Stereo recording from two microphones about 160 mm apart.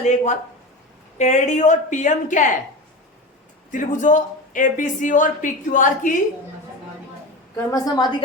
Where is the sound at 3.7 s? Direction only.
50° left (ahead or behind).